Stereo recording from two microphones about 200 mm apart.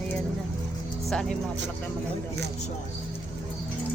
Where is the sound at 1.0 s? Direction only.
Centre (ahead or behind).